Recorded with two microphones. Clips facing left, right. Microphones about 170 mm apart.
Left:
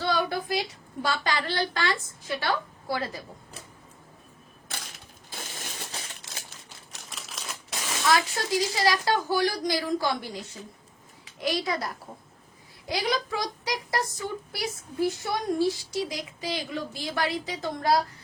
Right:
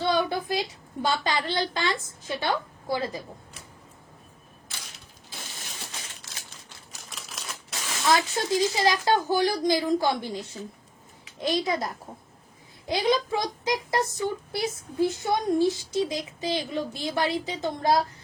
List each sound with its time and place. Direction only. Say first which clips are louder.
0.0 s a sound: right 2 dB; 20° right (ahead or behind)
1.0 s speech: right 2 dB; 20° right (ahead or behind)
5.3 s a sound: left 3 dB; 45° left (ahead or behind)
7.1 s typewriter: even; centre (ahead or behind)
8.1 s speech: right 2 dB; 20° right (ahead or behind)
11.3 s speech: right 2 dB; 25° right (ahead or behind)
12.9 s speech: right 4 dB; 25° right (ahead or behind)